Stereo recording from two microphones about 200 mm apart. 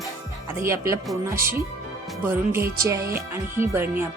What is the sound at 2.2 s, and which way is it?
Speech, 10° right (ahead or behind).